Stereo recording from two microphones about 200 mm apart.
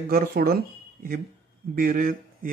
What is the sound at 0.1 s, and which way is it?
Speech, 50° right (ahead or behind).